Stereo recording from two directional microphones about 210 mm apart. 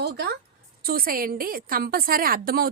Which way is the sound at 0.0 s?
50° right (ahead or behind).